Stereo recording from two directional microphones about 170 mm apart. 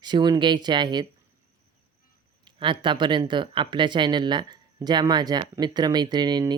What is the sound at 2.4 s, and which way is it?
Speech, 30° right (ahead or behind).